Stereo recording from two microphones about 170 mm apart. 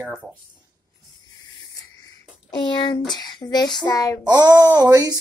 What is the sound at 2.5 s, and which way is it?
Speech, 25° left (ahead or behind).